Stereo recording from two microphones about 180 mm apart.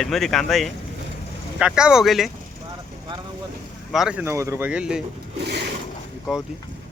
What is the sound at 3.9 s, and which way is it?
Speech, 5° right (ahead or behind).